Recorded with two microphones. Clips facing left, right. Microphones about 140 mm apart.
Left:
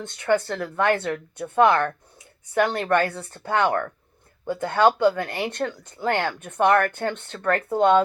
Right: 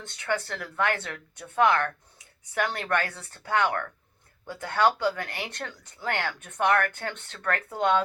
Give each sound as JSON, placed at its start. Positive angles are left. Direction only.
{"t": 0.0, "sound": "a woman's voice", "side_deg": 20}